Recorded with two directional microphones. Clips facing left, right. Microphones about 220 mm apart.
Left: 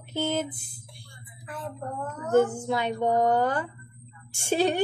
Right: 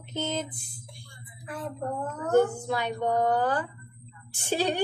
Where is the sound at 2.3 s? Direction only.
20° left (ahead or behind).